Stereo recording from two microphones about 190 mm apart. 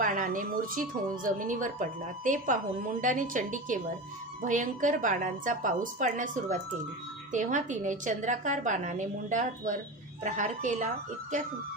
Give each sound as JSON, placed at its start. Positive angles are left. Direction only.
{"t": 0.0, "sound": "a woman's voice", "side_deg": -45}